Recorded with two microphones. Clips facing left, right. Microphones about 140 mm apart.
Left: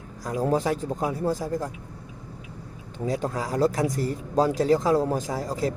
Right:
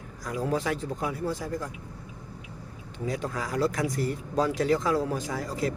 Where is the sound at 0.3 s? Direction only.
40° left (ahead or behind).